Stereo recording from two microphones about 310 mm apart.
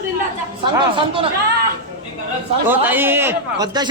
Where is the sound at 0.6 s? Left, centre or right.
Centre.